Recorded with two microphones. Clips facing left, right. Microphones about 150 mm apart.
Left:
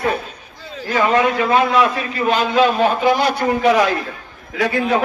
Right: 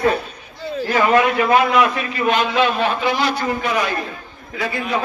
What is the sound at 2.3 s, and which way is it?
A man's voice, 40° left (ahead or behind).